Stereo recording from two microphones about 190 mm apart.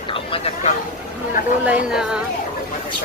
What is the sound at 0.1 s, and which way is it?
Vehicle, 30° left (ahead or behind).